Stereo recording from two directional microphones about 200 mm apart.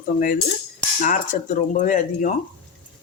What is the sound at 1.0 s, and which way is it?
Speech, 40° left (ahead or behind).